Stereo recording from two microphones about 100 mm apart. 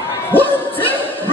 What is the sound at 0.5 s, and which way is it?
Music, 20° left (ahead or behind).